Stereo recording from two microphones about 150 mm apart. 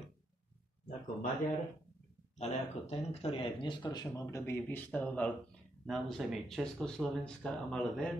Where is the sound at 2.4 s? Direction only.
45° left (ahead or behind).